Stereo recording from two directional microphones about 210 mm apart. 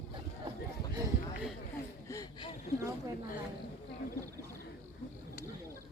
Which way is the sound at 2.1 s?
15° left (ahead or behind).